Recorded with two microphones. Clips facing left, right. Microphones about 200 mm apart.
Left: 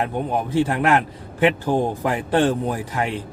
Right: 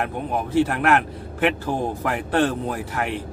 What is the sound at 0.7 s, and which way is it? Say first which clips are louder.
Speech: left 1 dB; 15° left (ahead or behind).